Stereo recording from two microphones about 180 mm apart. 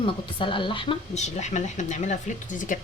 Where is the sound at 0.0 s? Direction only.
30° left (ahead or behind).